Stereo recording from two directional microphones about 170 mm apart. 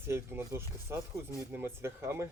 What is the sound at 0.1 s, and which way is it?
Speech, 15° right (ahead or behind).